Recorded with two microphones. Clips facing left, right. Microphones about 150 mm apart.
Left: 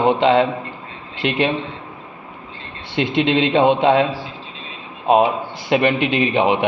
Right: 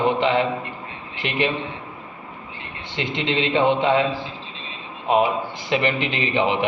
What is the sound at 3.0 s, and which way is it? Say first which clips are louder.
Speech: left 7 dB; 65° left (ahead or behind).